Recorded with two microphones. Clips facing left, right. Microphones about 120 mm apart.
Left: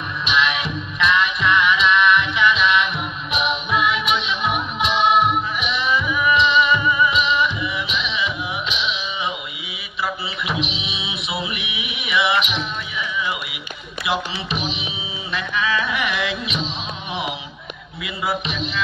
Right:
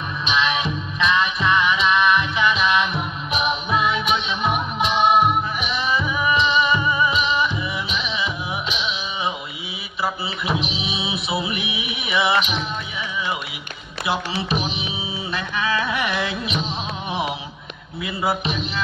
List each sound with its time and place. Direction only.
0.2 s music: 30° right (ahead or behind)
4.7 s music: 5° right (ahead or behind)
5.7 s music: 35° right (ahead or behind)
10.0 s music: 35° right (ahead or behind)
15.5 s music: 30° right (ahead or behind)
18.0 s music: 30° right (ahead or behind)